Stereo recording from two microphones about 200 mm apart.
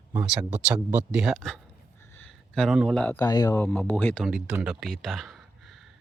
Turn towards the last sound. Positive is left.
turn(degrees=0)  # may be behind; listen again after turning